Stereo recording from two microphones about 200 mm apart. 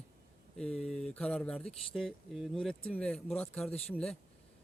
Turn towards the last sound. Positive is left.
turn(degrees=5)  # may be behind; listen again after turning